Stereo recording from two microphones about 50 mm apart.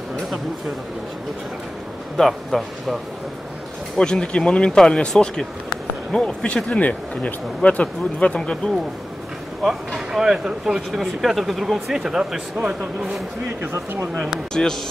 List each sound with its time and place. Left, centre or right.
2.1 s speech: centre
4.0 s speech: centre
9.6 s speech: centre
10.9 s speech: centre
14.5 s speech: centre